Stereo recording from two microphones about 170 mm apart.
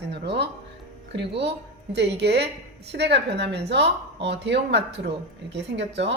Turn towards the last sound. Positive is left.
turn(degrees=-90)